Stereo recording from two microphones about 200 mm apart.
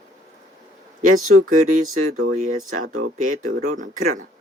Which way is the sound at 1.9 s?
90° right.